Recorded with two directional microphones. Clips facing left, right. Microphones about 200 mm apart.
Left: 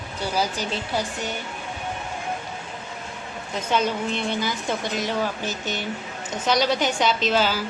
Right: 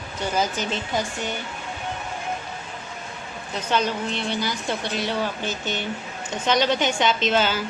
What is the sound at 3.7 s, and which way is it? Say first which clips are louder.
Speech: even; 10° left (ahead or behind).